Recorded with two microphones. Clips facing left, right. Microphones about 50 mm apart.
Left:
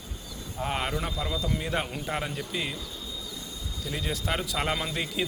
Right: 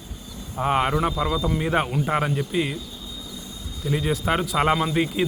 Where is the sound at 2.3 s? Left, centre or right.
Centre.